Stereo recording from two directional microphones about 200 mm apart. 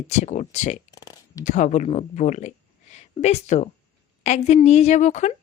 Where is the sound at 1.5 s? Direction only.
35° left (ahead or behind).